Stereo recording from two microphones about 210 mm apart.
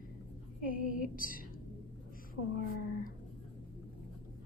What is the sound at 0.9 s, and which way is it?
Speech, 40° left (ahead or behind).